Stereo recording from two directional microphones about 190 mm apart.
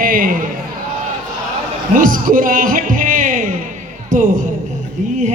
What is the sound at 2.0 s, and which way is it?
Music, 45° right (ahead or behind).